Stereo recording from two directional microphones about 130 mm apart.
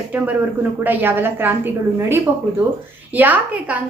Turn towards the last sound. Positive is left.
turn(degrees=-10)  # may be behind; listen again after turning